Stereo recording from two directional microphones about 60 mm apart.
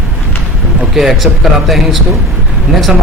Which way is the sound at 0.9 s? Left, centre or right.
Centre.